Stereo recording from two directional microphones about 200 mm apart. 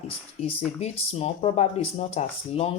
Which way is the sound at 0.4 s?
30° left (ahead or behind).